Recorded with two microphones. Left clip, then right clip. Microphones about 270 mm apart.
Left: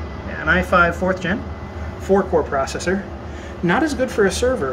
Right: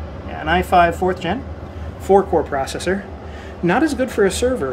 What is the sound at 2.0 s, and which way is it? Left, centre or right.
Speech, centre.